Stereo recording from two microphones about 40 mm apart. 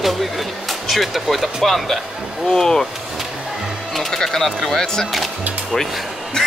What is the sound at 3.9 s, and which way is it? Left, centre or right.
Speech, centre.